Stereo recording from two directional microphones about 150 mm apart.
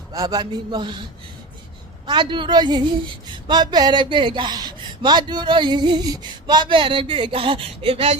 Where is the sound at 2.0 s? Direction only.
30° right (ahead or behind).